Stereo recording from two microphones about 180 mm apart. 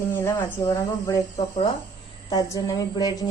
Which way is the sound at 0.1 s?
15° left (ahead or behind).